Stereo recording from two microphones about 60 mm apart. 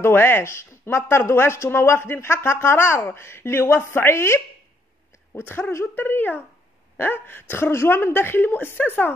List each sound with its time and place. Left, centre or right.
0.0 s a woman's voice: left
5.9 s a woman's voice: left